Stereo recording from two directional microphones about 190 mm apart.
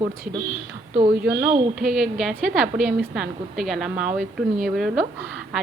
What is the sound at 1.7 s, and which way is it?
A woman's voice, centre (ahead or behind).